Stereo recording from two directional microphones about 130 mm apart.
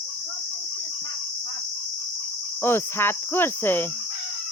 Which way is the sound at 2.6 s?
20° left (ahead or behind).